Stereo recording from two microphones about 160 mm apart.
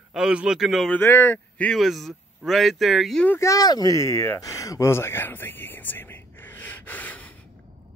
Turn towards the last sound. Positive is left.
turn(degrees=10)  # may be behind; listen again after turning